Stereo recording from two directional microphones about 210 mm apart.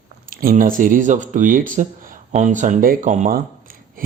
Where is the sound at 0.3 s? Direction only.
40° right (ahead or behind).